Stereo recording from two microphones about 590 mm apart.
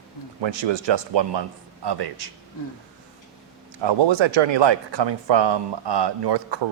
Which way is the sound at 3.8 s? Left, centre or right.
Right.